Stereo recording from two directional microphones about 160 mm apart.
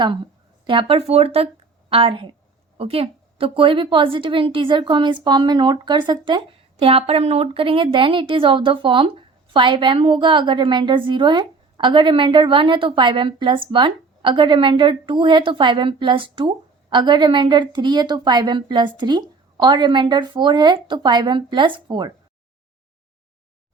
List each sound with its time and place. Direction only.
0.7 s a woman's voice: 35° right (ahead or behind)